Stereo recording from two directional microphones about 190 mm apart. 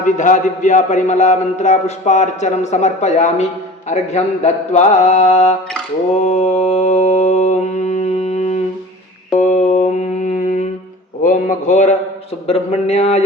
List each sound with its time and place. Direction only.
0.0 s a man's voice: 40° left (ahead or behind)
6.1 s mantra: 40° left (ahead or behind)
9.4 s music: 40° left (ahead or behind)
11.2 s a sound: 40° left (ahead or behind)